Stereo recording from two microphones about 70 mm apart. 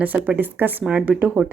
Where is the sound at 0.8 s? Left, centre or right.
Centre.